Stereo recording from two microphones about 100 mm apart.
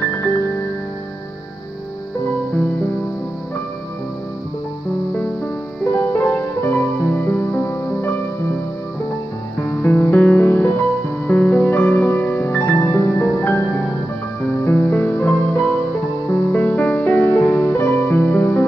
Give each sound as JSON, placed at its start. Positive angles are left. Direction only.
{"t": 5.9, "sound": "music", "side_deg": 20}
{"t": 9.6, "sound": "music", "side_deg": 20}